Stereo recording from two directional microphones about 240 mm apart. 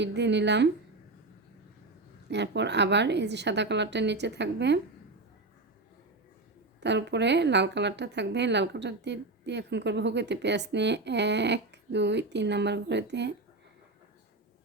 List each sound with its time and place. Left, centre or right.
0.0 s a woman's voice: right
2.3 s a woman's voice: right
6.7 s a woman's voice: right